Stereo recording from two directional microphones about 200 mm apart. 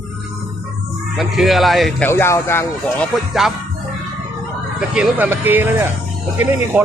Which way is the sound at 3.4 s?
Centre (ahead or behind).